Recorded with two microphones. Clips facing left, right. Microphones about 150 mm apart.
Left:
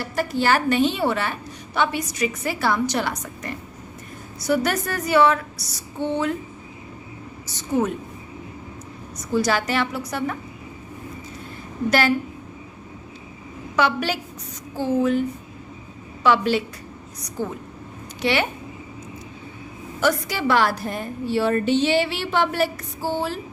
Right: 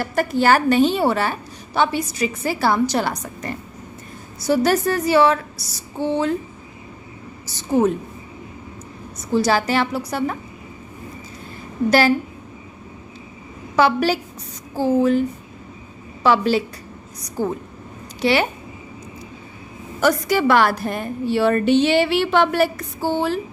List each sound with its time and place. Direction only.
0.0 s a woman's voice: 50° right (ahead or behind); by 6.3 s 30° right (ahead or behind)
7.5 s a woman's voice: 30° right (ahead or behind)
9.3 s a woman's voice: 30° right (ahead or behind)
11.9 s a woman's voice: 35° right (ahead or behind)
13.7 s a woman's voice: 35° right (ahead or behind)
16.2 s a woman's voice: 35° right (ahead or behind)
18.2 s a woman's voice: 35° right (ahead or behind)
20.0 s a woman's voice: 45° right (ahead or behind); by 23.0 s 65° right (ahead or behind)